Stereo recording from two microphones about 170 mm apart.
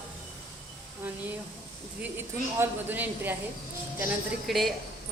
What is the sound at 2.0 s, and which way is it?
Speech, 10° right (ahead or behind).